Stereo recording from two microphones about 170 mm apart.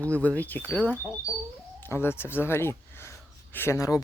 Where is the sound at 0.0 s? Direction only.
10° left (ahead or behind).